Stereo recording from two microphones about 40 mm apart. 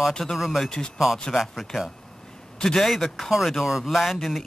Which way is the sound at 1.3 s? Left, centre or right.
Centre.